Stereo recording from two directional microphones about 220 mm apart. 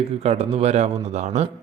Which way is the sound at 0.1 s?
30° right (ahead or behind).